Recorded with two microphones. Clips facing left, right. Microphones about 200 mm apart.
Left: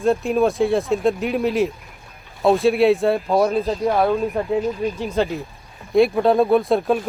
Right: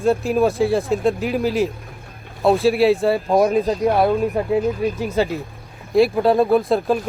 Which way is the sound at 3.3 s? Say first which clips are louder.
Right 2 dB; 15° right (ahead or behind).